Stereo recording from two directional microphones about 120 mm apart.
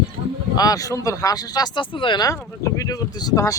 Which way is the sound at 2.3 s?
25° left (ahead or behind).